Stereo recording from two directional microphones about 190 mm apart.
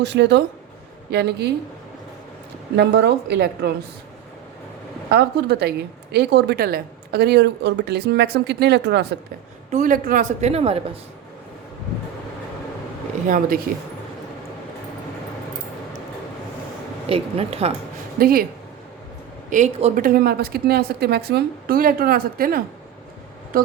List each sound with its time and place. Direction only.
0.0 s a woman's voice: 65° right (ahead or behind)
2.7 s a woman's voice: 60° right (ahead or behind)
5.1 s a woman's voice: 60° right (ahead or behind)
9.7 s speech: 45° right (ahead or behind)
13.2 s a woman's voice: 45° right (ahead or behind)
17.1 s speech: 30° right (ahead or behind)
18.2 s a woman's voice: 50° right (ahead or behind)
19.5 s a woman's voice: 40° right (ahead or behind)